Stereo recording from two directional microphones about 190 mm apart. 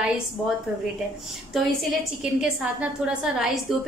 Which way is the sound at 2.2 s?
5° right (ahead or behind).